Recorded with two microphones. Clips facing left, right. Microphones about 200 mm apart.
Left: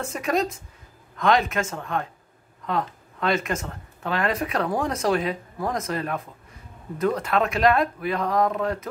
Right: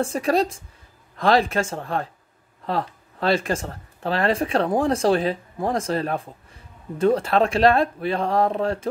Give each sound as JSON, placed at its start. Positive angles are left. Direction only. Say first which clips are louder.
{"t": 0.0, "sound": "speech", "louder": "right 4 dB", "side_deg": -30}